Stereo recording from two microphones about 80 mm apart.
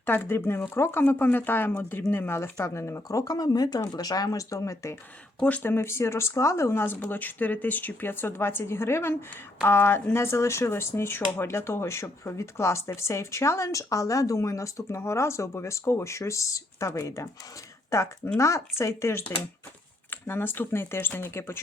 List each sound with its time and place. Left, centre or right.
0.0 s speech: left
3.3 s speech: left
5.4 s speech: centre
5.7 s speech: left
18.3 s speech: left